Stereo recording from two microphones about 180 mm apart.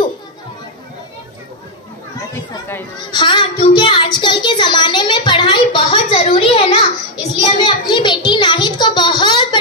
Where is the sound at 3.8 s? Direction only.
25° left (ahead or behind).